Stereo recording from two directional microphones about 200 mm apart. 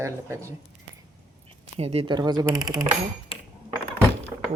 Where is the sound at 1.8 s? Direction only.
30° right (ahead or behind).